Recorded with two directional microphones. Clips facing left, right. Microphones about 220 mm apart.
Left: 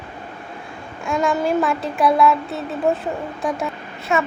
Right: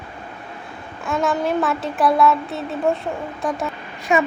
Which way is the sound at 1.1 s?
Centre (ahead or behind).